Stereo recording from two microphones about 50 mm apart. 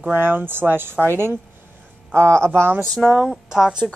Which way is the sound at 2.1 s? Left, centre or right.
Right.